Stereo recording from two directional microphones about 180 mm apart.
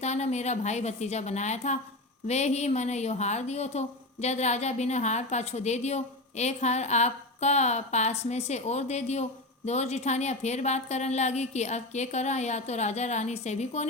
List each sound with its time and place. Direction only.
0.0 s a woman's voice: 40° left (ahead or behind)